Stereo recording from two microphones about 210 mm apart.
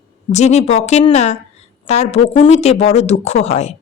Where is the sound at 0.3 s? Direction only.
30° left (ahead or behind).